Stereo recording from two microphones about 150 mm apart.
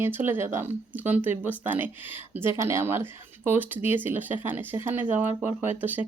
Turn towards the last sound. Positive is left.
turn(degrees=-10)  # may be behind; listen again after turning